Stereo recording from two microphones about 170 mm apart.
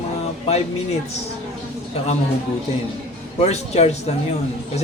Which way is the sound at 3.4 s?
40° left (ahead or behind).